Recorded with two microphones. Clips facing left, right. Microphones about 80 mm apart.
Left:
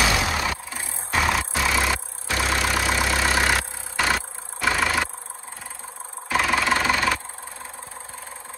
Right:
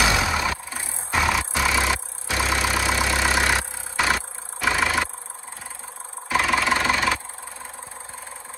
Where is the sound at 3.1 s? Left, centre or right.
Centre.